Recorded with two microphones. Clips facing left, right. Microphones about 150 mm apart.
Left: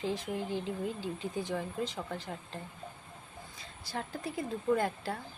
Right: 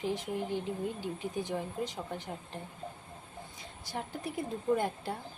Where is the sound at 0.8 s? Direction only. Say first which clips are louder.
Even; 20° right (ahead or behind).